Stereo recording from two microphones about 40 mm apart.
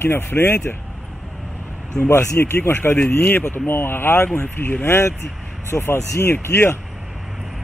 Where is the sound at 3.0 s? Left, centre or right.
Left.